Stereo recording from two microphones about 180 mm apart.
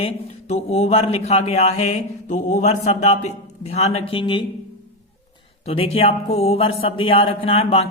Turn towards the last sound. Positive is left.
turn(degrees=35)  # may be behind; listen again after turning